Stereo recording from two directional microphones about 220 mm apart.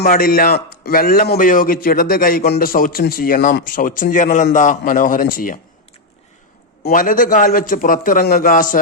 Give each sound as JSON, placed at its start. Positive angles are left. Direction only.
{"t": 0.0, "sound": "a man's voice", "side_deg": 40}
{"t": 6.8, "sound": "a man's voice", "side_deg": 40}